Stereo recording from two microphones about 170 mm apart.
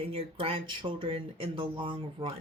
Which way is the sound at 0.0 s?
35° right (ahead or behind).